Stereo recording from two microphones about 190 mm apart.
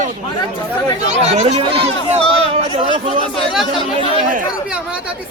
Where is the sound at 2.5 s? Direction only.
30° right (ahead or behind).